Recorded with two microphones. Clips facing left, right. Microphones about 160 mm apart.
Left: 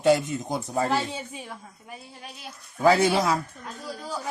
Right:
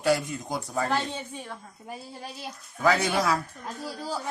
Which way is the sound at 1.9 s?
35° right (ahead or behind).